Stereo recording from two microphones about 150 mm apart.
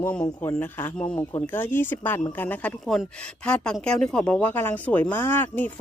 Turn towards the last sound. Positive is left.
turn(degrees=15)  # may be behind; listen again after turning